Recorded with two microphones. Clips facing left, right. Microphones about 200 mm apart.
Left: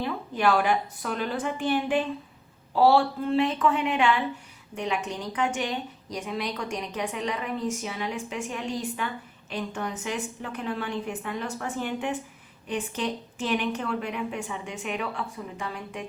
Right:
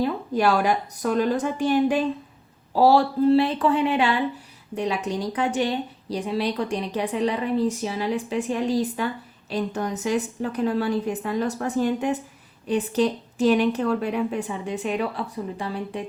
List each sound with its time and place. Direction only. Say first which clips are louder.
0.0 s a woman's voice: right 4 dB; 40° right (ahead or behind)